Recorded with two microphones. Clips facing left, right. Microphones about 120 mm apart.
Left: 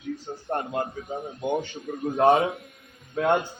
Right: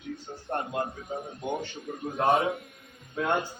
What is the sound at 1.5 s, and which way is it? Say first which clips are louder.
A man's voice: left 5 dB; centre (ahead or behind).